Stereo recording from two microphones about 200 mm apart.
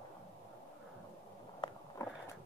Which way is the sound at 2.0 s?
15° left (ahead or behind).